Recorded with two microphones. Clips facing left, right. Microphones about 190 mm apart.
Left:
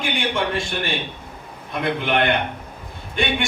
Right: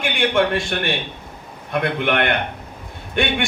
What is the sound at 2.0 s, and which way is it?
A man's voice, 60° right (ahead or behind).